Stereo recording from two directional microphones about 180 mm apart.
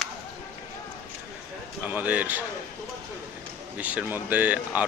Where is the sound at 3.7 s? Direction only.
10° right (ahead or behind).